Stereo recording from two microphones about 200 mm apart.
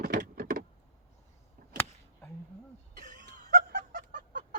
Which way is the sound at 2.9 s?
40° right (ahead or behind).